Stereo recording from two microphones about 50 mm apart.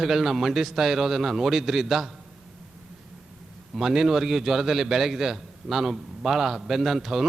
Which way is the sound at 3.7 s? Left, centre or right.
Centre.